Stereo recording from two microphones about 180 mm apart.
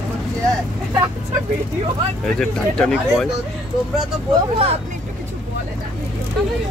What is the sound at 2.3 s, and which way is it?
Speech, 5° left (ahead or behind).